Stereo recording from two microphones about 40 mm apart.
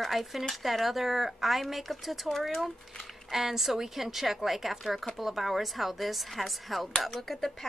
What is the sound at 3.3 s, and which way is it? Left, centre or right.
Speech, centre.